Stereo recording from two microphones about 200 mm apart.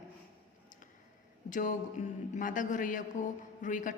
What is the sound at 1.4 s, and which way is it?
A woman's voice, 40° left (ahead or behind).